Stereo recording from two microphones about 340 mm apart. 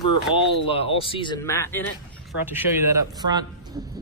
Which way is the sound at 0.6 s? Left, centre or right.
Centre.